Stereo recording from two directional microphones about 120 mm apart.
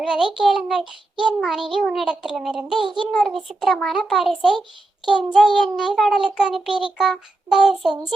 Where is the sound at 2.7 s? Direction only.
40° right (ahead or behind).